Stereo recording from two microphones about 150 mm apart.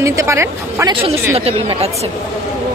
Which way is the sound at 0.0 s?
20° right (ahead or behind).